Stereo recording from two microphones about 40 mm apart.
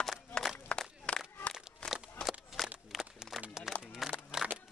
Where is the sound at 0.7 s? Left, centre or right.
Left.